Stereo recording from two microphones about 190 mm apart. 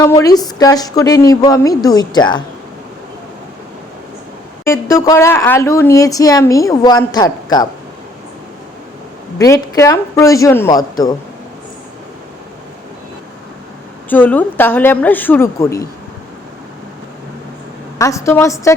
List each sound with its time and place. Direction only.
0.0 s a woman's voice: 20° left (ahead or behind)
4.6 s speech: 15° left (ahead or behind)
9.4 s speech: 15° left (ahead or behind)
14.1 s speech: 10° left (ahead or behind)
17.9 s speech: 15° left (ahead or behind)